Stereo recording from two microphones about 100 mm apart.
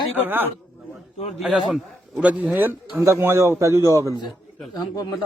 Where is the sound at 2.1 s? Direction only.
15° right (ahead or behind); by 3.8 s 30° right (ahead or behind).